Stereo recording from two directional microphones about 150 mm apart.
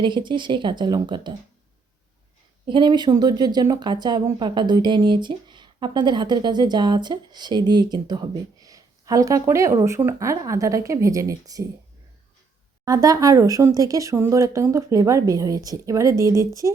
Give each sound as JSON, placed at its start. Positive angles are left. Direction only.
{"t": 0.0, "sound": "speech", "side_deg": -30}
{"t": 2.6, "sound": "a woman's voice", "side_deg": -30}
{"t": 12.8, "sound": "a woman's voice", "side_deg": -25}